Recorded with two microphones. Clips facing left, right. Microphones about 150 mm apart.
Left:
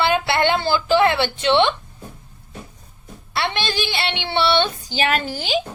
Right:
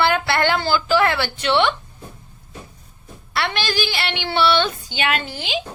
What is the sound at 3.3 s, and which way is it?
A woman's voice, 25° left (ahead or behind).